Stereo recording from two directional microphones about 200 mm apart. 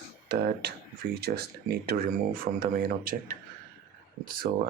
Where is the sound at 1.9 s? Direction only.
50° right (ahead or behind).